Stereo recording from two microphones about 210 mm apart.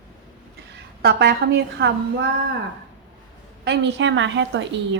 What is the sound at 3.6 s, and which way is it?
A woman's voice, 55° right (ahead or behind).